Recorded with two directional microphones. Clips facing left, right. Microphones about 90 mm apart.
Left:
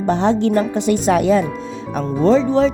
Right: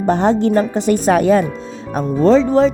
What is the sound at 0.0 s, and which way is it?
Speech, 45° right (ahead or behind).